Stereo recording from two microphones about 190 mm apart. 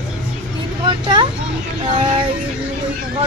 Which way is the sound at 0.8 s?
25° right (ahead or behind).